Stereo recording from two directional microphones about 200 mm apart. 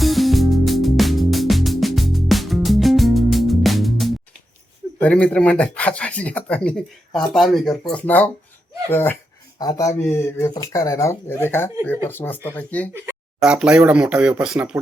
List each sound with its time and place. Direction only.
0.0 s music: centre (ahead or behind)
4.9 s speech: 5° left (ahead or behind)
12.9 s speech: 10° right (ahead or behind)